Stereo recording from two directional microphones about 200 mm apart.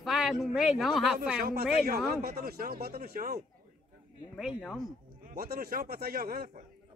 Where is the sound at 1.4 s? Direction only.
50° right (ahead or behind).